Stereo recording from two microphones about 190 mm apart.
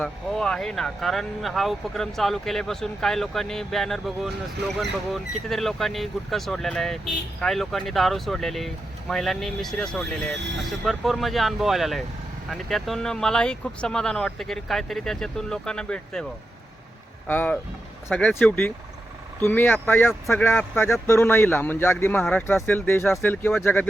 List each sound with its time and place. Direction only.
0.0 s speech: 5° left (ahead or behind)
17.2 s a man's voice: 10° left (ahead or behind)